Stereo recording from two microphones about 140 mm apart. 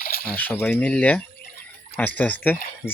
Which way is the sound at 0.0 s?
90° left.